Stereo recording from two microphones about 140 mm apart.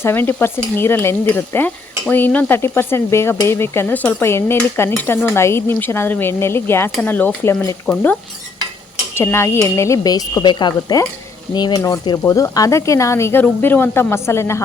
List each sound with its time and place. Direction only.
0.0 s stir: 15° left (ahead or behind)
9.1 s speech: 20° left (ahead or behind)